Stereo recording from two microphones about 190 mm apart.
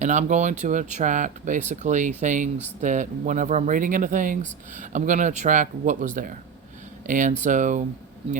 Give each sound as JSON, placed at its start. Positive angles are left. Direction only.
{"t": 0.0, "sound": "speech", "side_deg": -40}